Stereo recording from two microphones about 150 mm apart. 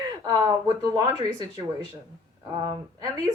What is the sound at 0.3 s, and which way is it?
Speech, 25° right (ahead or behind).